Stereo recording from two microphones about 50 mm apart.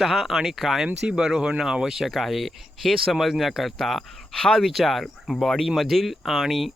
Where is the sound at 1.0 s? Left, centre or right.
Right.